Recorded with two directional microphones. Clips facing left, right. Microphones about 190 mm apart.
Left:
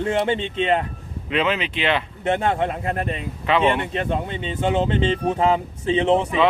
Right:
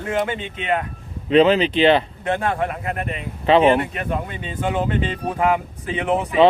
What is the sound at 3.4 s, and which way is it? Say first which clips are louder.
Speech: right 5 dB; 30° right (ahead or behind).